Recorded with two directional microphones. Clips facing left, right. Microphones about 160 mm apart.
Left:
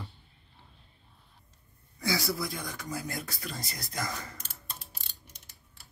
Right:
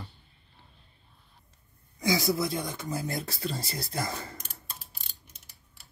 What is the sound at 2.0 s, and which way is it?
Speech, 20° right (ahead or behind).